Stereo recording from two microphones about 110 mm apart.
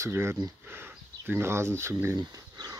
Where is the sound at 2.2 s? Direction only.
35° right (ahead or behind).